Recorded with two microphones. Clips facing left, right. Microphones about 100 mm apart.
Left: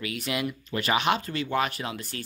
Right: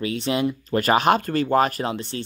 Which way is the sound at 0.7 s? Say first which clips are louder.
Right 7 dB; 45° right (ahead or behind).